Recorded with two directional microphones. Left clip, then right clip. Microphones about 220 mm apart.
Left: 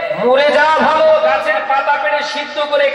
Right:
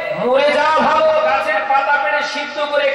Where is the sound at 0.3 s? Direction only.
10° left (ahead or behind).